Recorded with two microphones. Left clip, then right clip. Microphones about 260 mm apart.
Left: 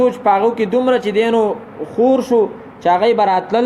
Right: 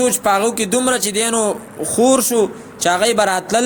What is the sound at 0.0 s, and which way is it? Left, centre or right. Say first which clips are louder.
A man's voice: left 2 dB; right.